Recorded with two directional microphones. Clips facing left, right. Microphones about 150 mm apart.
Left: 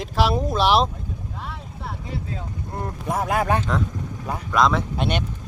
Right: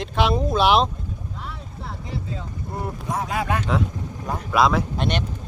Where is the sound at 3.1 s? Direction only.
55° left (ahead or behind).